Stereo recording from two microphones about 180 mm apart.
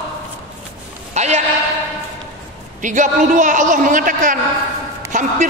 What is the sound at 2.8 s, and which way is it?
A man's voice, 45° right (ahead or behind).